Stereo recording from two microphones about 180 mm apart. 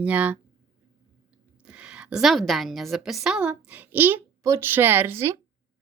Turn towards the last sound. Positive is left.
turn(degrees=-15)  # may be behind; listen again after turning